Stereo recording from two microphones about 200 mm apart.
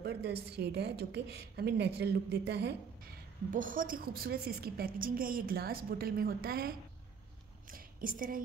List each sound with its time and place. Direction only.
0.0 s a woman's voice: 55° right (ahead or behind)
3.5 s a woman's voice: 45° right (ahead or behind)